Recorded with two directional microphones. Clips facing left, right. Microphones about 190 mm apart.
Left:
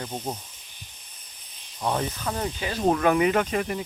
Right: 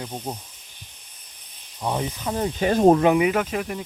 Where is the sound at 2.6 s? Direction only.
45° right (ahead or behind).